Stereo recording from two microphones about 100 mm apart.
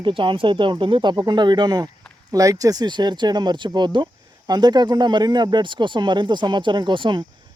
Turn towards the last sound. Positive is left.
turn(degrees=-50)  # may be behind; listen again after turning